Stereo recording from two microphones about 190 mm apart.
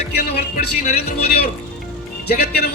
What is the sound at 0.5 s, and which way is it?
Speech, 40° left (ahead or behind).